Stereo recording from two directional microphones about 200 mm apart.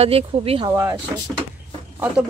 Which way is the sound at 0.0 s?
30° right (ahead or behind).